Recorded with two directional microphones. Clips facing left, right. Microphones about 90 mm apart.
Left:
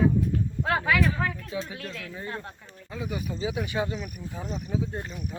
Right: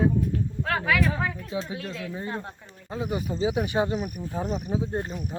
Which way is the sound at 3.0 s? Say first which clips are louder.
Right 4 dB; 25° right (ahead or behind).